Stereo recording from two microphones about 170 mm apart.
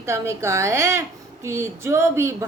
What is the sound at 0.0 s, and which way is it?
A woman's voice, 15° right (ahead or behind).